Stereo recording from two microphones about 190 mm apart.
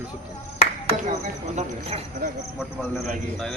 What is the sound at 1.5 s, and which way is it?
Speech, 30° right (ahead or behind).